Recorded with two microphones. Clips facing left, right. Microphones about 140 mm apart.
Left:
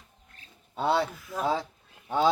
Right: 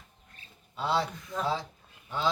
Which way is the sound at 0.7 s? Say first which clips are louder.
Left 3 dB; 55° left (ahead or behind).